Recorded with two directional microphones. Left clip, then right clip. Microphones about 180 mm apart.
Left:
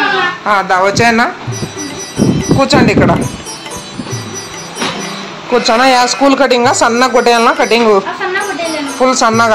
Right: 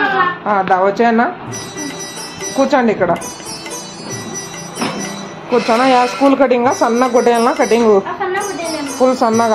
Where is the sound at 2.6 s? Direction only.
5° left (ahead or behind).